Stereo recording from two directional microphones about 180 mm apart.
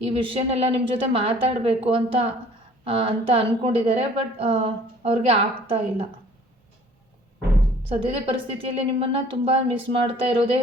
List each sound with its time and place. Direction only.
0.0 s a woman's voice: 30° right (ahead or behind)
7.9 s a woman's voice: 30° right (ahead or behind)